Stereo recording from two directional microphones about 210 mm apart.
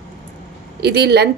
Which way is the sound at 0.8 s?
50° right (ahead or behind).